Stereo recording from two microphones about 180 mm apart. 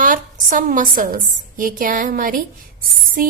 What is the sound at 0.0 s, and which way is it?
A woman's voice, 50° right (ahead or behind).